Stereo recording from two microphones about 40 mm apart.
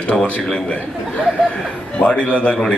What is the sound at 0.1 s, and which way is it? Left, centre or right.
Speech, centre.